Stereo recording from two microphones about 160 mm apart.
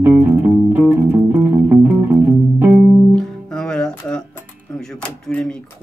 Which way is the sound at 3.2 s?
5° left (ahead or behind).